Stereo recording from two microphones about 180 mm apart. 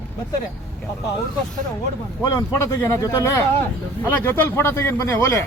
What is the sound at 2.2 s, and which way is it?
Speech, 15° left (ahead or behind).